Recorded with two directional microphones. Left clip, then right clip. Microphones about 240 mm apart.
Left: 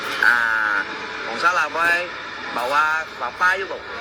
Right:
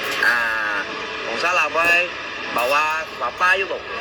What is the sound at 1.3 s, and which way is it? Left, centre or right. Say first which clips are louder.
A man's voice: even; centre.